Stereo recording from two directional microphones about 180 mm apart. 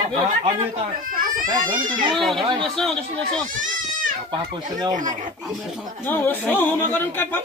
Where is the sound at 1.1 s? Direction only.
50° right (ahead or behind).